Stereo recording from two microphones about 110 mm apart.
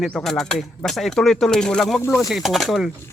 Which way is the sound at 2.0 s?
25° left (ahead or behind).